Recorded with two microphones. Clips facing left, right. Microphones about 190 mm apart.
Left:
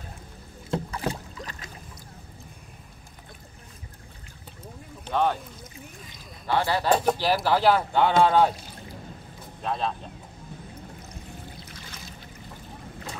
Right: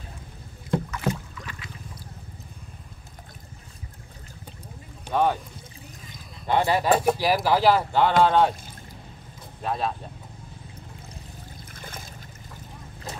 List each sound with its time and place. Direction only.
0.7 s rowboat: 35° left (ahead or behind)
5.0 s speech: 10° right (ahead or behind)
6.4 s speech: 20° right (ahead or behind); by 8.5 s centre (ahead or behind)
9.6 s speech: 5° right (ahead or behind)
11.7 s trickle: 50° right (ahead or behind)